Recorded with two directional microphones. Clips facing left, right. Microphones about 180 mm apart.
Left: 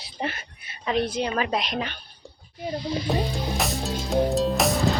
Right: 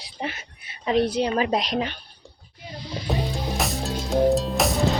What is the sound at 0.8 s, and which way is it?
A woman's voice, 35° right (ahead or behind).